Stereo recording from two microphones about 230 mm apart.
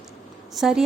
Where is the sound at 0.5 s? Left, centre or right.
Centre.